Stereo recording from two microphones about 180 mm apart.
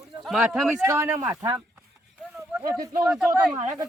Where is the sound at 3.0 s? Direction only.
5° right (ahead or behind).